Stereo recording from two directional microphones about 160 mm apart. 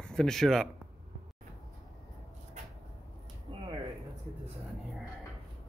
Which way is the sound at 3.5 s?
30° right (ahead or behind).